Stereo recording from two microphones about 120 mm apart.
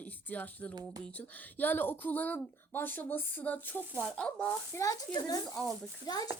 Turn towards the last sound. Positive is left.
turn(degrees=35)  # may be behind; listen again after turning